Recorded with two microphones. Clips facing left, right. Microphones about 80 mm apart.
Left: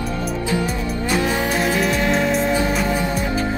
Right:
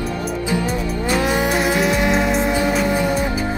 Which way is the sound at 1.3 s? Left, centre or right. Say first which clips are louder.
Right 2 dB; centre.